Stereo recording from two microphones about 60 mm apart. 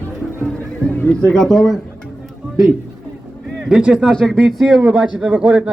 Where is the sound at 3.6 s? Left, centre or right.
Centre.